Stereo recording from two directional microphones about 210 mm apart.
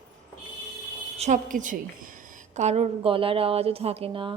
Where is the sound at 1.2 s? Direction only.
40° right (ahead or behind).